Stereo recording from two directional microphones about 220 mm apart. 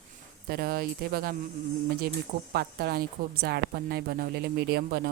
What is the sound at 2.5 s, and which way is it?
A woman's voice, 45° right (ahead or behind).